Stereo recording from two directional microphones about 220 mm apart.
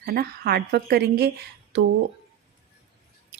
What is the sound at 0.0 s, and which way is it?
A woman's voice, 45° right (ahead or behind).